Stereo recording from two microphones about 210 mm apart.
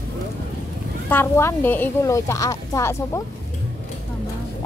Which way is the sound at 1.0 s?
10° left (ahead or behind).